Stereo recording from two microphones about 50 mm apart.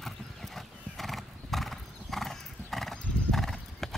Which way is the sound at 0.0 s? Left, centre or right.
Centre.